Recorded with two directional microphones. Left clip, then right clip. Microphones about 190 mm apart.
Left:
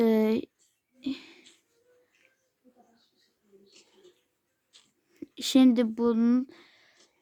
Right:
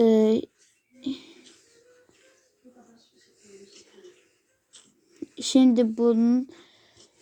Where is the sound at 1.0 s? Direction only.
25° left (ahead or behind).